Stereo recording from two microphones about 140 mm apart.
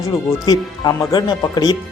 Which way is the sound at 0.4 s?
30° left (ahead or behind).